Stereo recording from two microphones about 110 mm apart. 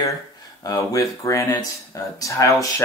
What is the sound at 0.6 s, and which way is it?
Speech, 30° left (ahead or behind).